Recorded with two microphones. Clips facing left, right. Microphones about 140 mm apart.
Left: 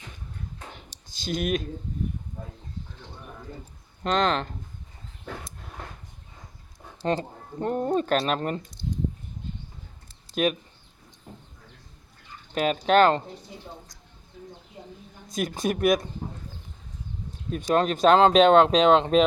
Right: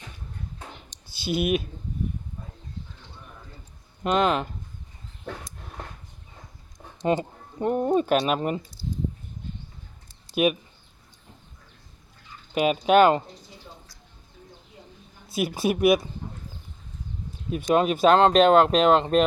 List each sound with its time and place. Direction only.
1.1 s speech: 10° right (ahead or behind)
4.0 s speech: 10° right (ahead or behind)
7.0 s speech: 15° right (ahead or behind)
10.3 s speech: 10° right (ahead or behind)
12.5 s speech: 10° right (ahead or behind)
15.3 s speech: 5° right (ahead or behind)
17.7 s speech: 5° right (ahead or behind)